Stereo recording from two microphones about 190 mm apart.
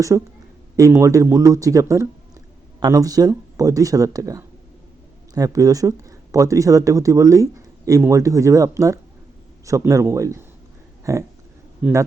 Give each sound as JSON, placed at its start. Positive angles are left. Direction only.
{"t": 0.1, "sound": "speech", "side_deg": -15}
{"t": 11.0, "sound": "pig", "side_deg": -15}
{"t": 11.8, "sound": "speech", "side_deg": -15}